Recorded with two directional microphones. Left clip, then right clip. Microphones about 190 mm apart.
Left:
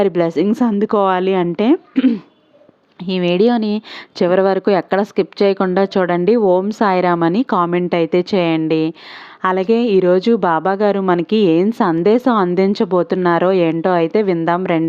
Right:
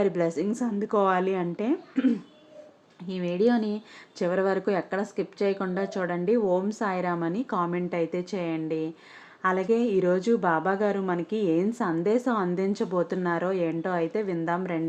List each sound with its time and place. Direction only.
0.0 s speech: 45° left (ahead or behind)